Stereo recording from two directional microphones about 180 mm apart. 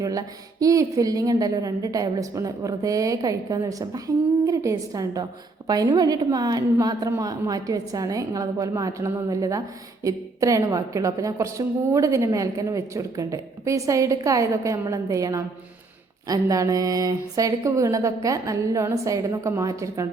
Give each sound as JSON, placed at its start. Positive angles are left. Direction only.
{"t": 0.0, "sound": "a woman's voice", "side_deg": -20}